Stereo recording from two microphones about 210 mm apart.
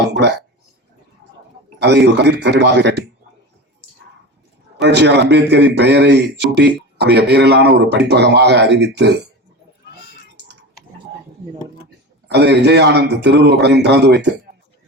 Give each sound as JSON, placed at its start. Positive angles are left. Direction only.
{"t": 0.0, "sound": "a sound", "side_deg": -55}
{"t": 1.8, "sound": "a man's voice", "side_deg": -55}
{"t": 4.8, "sound": "a man's voice", "side_deg": -55}
{"t": 12.3, "sound": "a man's voice", "side_deg": -55}